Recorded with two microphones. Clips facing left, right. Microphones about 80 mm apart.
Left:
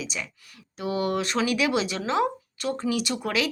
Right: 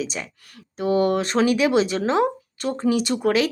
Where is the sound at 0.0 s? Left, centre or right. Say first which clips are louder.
Right 5 dB; right.